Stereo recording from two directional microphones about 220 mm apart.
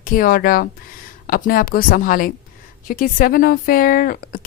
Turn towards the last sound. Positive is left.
turn(degrees=40)  # may be behind; listen again after turning